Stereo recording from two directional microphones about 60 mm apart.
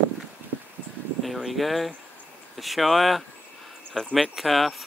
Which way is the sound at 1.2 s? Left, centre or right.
Centre.